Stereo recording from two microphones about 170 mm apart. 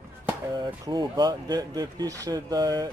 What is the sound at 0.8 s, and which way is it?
Speech, 25° right (ahead or behind).